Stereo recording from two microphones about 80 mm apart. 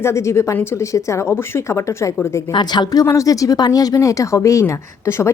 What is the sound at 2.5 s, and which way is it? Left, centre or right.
Speech, left.